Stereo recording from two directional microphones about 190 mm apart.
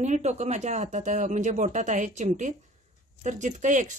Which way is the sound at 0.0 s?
40° right (ahead or behind).